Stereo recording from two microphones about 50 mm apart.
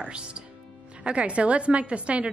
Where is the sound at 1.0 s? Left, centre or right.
Right.